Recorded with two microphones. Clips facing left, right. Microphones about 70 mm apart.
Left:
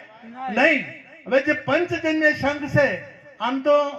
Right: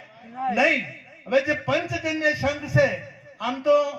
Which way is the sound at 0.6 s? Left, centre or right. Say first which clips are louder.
Left 5 dB; left.